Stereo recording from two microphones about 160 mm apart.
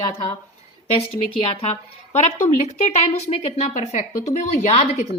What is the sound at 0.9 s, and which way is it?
A woman's voice, 35° left (ahead or behind).